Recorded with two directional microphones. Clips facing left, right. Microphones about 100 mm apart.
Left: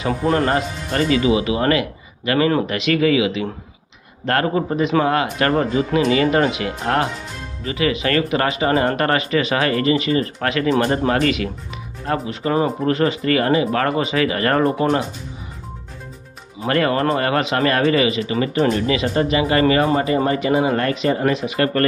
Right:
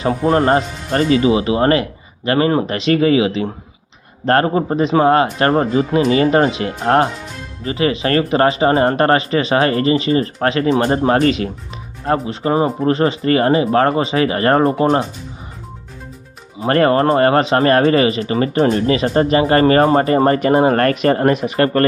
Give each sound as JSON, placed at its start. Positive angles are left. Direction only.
{"t": 0.0, "sound": "speech", "side_deg": -30}
{"t": 16.6, "sound": "speech", "side_deg": -40}